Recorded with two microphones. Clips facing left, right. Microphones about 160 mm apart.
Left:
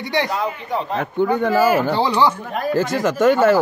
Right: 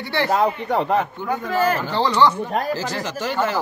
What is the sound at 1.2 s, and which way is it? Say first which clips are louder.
Speech: left 8 dB; 60° left (ahead or behind).